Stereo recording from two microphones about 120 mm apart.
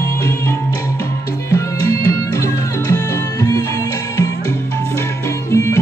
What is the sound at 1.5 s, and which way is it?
Music, 25° left (ahead or behind).